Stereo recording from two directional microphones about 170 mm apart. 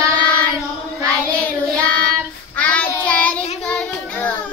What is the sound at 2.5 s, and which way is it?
Child singing, 10° left (ahead or behind).